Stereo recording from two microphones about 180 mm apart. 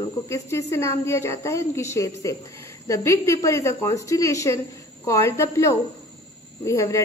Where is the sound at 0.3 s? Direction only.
15° left (ahead or behind).